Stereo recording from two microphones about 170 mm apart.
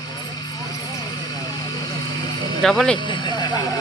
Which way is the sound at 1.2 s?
25° left (ahead or behind).